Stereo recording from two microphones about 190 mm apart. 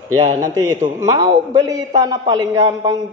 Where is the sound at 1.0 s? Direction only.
20° right (ahead or behind).